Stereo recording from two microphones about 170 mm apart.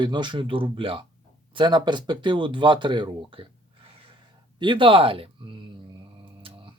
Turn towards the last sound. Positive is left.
turn(degrees=-30)  # may be behind; listen again after turning